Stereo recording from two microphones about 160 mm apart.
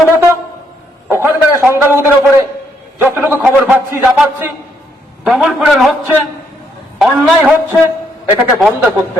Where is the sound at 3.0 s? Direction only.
10° right (ahead or behind).